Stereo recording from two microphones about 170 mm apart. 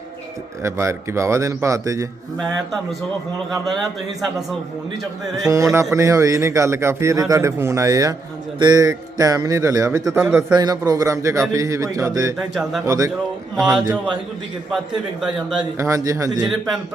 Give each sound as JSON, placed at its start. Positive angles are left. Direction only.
{"t": 0.6, "sound": "speech", "side_deg": -15}
{"t": 3.5, "sound": "a man's voice", "side_deg": 0}
{"t": 5.4, "sound": "a man's voice", "side_deg": -20}
{"t": 12.4, "sound": "a man's voice", "side_deg": 0}
{"t": 12.8, "sound": "a man's voice", "side_deg": -20}
{"t": 13.6, "sound": "a man's voice", "side_deg": 0}
{"t": 15.8, "sound": "a man's voice", "side_deg": -20}
{"t": 16.5, "sound": "a man's voice", "side_deg": 0}